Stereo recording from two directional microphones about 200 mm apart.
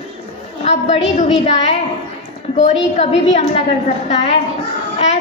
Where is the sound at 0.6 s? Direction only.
35° left (ahead or behind).